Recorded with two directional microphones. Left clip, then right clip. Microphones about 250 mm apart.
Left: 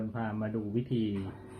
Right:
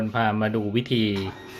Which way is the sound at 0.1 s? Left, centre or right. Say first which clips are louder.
Right 13 dB; right.